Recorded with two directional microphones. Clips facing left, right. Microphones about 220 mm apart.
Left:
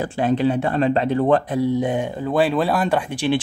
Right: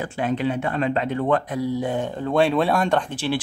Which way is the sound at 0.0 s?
35° left (ahead or behind).